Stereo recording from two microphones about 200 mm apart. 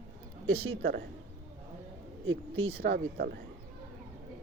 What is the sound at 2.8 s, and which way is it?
Speech, 50° right (ahead or behind).